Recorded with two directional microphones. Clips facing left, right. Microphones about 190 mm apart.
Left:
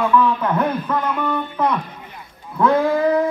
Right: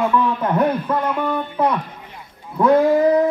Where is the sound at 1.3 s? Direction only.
10° right (ahead or behind).